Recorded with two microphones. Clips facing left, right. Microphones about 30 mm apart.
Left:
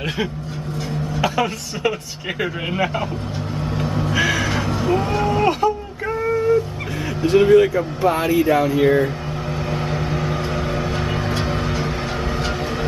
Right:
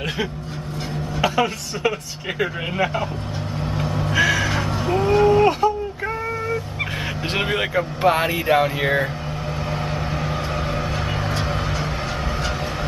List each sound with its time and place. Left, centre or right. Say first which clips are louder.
1.1 s speech: right 1 dB; centre
3.7 s vehicle: even; centre
7.2 s speech: left 11 dB; right
9.7 s vehicle: left 3 dB; centre